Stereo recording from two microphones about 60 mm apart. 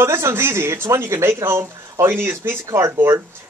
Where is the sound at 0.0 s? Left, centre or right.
Right.